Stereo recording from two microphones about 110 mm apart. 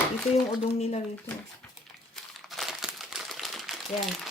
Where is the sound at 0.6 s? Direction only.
80° left.